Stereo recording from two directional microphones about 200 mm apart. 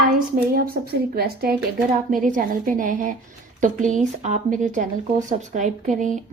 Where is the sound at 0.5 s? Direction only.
50° right (ahead or behind).